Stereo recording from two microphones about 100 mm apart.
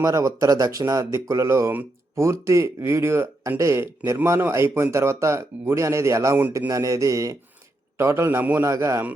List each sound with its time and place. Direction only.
0.0 s speech: 35° right (ahead or behind)